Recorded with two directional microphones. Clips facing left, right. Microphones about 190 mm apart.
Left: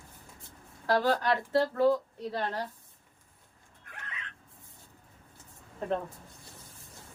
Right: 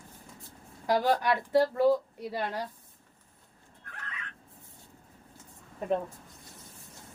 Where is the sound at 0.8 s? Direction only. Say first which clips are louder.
Right 1 dB; 15° right (ahead or behind).